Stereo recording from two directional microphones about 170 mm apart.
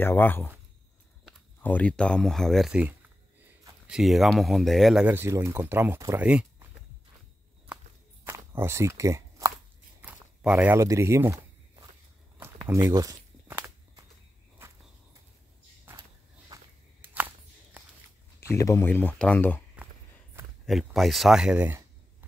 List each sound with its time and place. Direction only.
0.0 s speech: 10° left (ahead or behind)
1.6 s speech: 10° left (ahead or behind)
3.9 s speech: centre (ahead or behind)
6.2 s a sound: 5° right (ahead or behind)
7.6 s walk: 10° right (ahead or behind)
10.0 s a sound: 5° right (ahead or behind)
12.4 s walk: 15° right (ahead or behind)
16.5 s walk: 20° right (ahead or behind)
18.5 s speech: 15° left (ahead or behind)
20.6 s speech: centre (ahead or behind)